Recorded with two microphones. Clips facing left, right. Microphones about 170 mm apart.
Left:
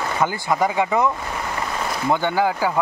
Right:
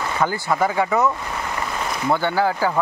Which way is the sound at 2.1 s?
15° left (ahead or behind).